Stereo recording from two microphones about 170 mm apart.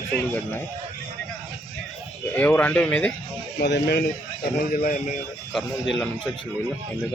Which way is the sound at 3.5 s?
85° left.